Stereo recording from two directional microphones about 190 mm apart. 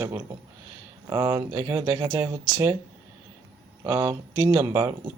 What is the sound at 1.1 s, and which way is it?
Speech, 15° right (ahead or behind).